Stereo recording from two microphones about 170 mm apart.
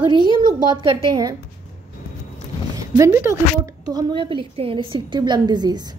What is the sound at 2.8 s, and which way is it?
A woman's voice, 20° right (ahead or behind).